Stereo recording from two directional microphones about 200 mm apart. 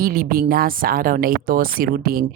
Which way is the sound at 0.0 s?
45° right (ahead or behind).